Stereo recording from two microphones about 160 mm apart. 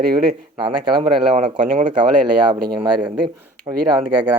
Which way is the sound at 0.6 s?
30° right (ahead or behind).